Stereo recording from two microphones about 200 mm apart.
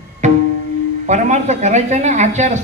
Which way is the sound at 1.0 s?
35° right (ahead or behind).